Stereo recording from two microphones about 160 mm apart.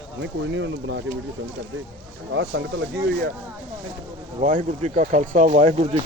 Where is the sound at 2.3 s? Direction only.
90° right.